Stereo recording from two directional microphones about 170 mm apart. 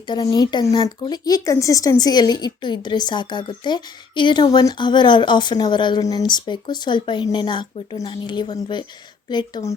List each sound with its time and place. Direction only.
0.1 s speech: 20° left (ahead or behind)